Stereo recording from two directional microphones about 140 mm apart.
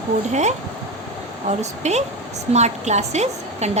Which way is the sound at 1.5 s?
55° right (ahead or behind).